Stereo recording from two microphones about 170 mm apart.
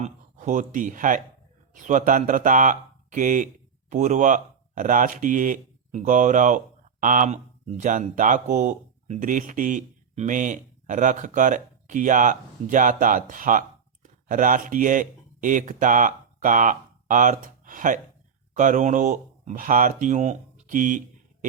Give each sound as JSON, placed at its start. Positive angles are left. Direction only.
{"t": 0.0, "sound": "speech", "side_deg": -45}